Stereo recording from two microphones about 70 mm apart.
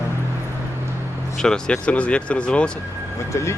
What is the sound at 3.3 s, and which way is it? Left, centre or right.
Speech, left.